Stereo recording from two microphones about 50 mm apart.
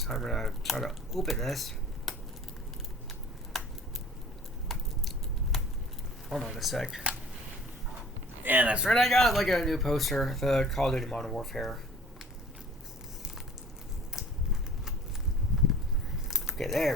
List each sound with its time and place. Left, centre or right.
0.0 s speech: centre
3.5 s scissors: centre
4.7 s a sound: centre
6.2 s speech: centre
7.1 s a sound: right
8.4 s speech: right
8.9 s speech: centre
14.2 s a sound: centre
16.3 s biting: centre